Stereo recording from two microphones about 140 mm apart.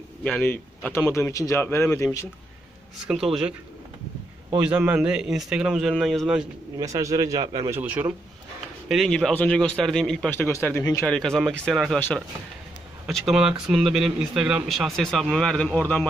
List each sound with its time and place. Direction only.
0.2 s speech: 10° left (ahead or behind)
4.6 s speech: 10° right (ahead or behind)
6.8 s a man's voice: 25° right (ahead or behind)
7.7 s speech: 10° right (ahead or behind)
8.8 s speech: centre (ahead or behind)
10.3 s speech: 15° left (ahead or behind)
11.0 s speech: 5° left (ahead or behind)
13.3 s speech: 5° right (ahead or behind)